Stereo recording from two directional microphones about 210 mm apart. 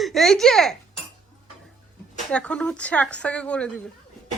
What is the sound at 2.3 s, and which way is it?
Speech, 5° left (ahead or behind).